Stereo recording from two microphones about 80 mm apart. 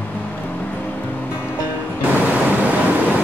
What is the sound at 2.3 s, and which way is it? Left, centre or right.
Vehicle, centre.